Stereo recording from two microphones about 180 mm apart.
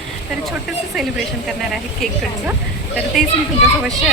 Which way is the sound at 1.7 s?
Centre (ahead or behind).